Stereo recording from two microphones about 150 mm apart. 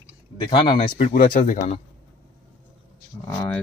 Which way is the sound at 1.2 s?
65° left (ahead or behind).